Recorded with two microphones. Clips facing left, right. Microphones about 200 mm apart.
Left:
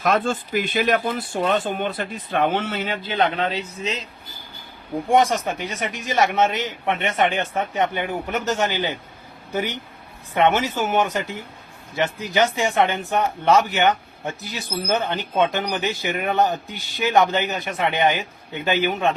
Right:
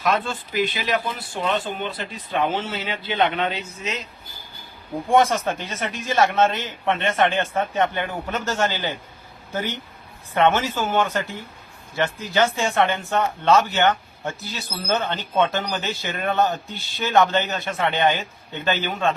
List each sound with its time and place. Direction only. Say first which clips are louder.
0.0 s speech: left 3 dB; 50° left (ahead or behind)
5.1 s speech: even; 15° left (ahead or behind)